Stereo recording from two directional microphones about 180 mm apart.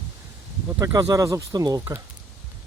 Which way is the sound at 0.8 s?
20° right (ahead or behind).